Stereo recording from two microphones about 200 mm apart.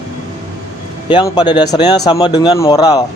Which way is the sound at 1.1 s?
20° left (ahead or behind).